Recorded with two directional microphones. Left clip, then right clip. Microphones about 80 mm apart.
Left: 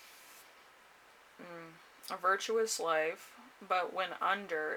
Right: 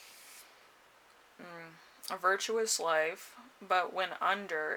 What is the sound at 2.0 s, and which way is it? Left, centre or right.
Speech, right.